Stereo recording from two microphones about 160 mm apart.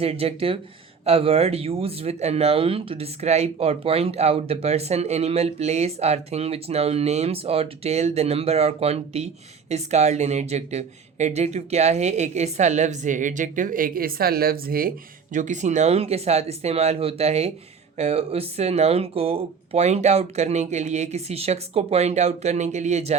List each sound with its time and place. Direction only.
0.0 s speech: 40° right (ahead or behind)